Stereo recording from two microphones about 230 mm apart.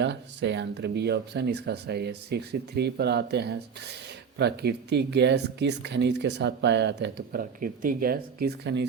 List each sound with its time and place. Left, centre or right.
0.0 s speech: right